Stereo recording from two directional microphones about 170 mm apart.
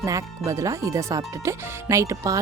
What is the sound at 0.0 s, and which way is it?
Speech, 20° right (ahead or behind).